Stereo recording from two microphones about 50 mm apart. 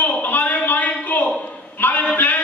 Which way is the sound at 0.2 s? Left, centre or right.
Left.